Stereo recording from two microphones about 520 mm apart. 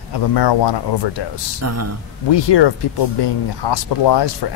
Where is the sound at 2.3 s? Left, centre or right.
Left.